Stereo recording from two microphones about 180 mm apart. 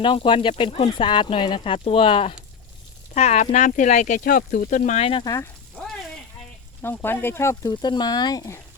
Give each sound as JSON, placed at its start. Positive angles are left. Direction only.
{"t": 0.0, "sound": "speech", "side_deg": 30}
{"t": 5.2, "sound": "speech", "side_deg": 20}
{"t": 5.7, "sound": "a sound", "side_deg": 0}
{"t": 6.8, "sound": "speech", "side_deg": 10}